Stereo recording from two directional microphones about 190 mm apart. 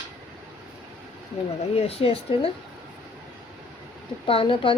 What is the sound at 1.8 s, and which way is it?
Speech, 30° left (ahead or behind).